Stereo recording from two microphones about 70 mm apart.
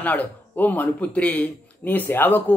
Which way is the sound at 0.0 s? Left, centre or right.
Left.